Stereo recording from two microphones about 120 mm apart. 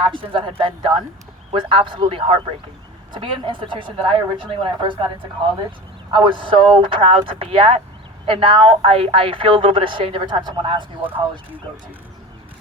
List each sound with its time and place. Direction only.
0.0 s speech: 40° right (ahead or behind)
6.1 s speech: 45° right (ahead or behind)